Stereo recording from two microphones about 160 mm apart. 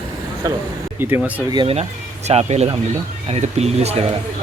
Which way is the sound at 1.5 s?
30° right (ahead or behind).